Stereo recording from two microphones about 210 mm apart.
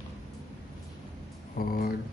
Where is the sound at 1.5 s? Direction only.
45° left (ahead or behind).